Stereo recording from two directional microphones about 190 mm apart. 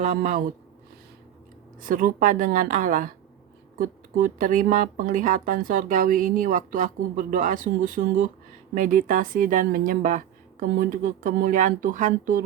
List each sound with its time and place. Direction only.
0.0 s speech: 40° right (ahead or behind)
1.9 s speech: 45° right (ahead or behind)